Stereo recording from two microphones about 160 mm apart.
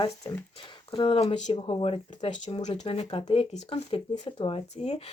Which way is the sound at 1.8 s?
40° left (ahead or behind).